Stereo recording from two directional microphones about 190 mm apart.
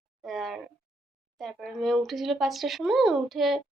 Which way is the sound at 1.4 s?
Centre (ahead or behind).